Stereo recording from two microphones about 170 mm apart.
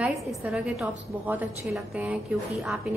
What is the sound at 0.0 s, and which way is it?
A woman's voice, centre (ahead or behind).